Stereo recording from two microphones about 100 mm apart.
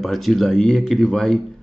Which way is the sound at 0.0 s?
Centre (ahead or behind).